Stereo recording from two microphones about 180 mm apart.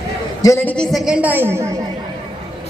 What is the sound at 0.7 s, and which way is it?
Speech, centre (ahead or behind).